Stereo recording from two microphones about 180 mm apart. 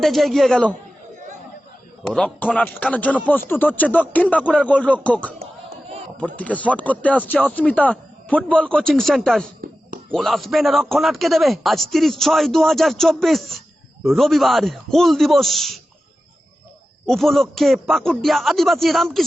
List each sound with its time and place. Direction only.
0.0 s a man's voice: centre (ahead or behind)
2.0 s a man's voice: 5° left (ahead or behind)
17.1 s a man's voice: centre (ahead or behind)